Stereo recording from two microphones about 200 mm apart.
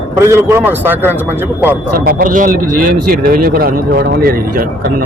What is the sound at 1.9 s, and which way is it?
A man's voice, 45° right (ahead or behind).